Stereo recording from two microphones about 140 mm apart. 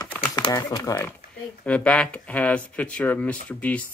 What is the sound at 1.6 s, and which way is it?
Speech, 10° left (ahead or behind).